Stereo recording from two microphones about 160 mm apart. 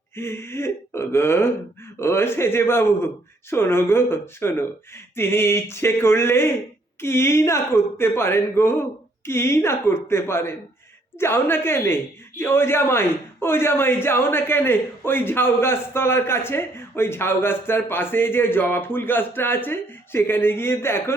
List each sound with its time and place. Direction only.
0.2 s a man's voice: 15° left (ahead or behind)